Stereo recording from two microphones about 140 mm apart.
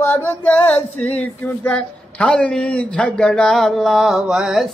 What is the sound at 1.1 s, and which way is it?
Speech, 10° left (ahead or behind).